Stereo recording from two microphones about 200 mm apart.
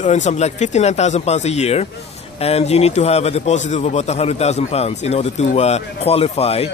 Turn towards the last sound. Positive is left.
turn(degrees=30)  # may be behind; listen again after turning